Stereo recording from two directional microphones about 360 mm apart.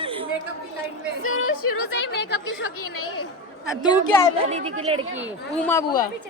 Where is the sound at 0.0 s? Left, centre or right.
Centre.